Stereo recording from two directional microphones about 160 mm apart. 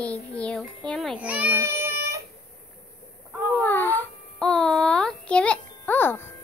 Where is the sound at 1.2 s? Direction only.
10° right (ahead or behind).